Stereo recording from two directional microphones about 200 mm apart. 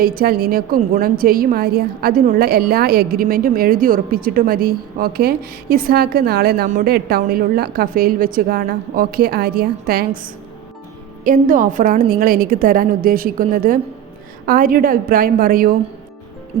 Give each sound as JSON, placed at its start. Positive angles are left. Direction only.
{"t": 0.0, "sound": "a woman's voice", "side_deg": -50}
{"t": 11.2, "sound": "a woman's voice", "side_deg": -45}